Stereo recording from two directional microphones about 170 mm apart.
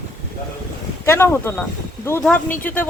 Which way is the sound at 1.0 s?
15° left (ahead or behind).